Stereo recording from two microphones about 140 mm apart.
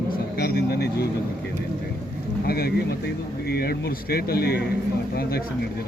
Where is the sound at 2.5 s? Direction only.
90° left.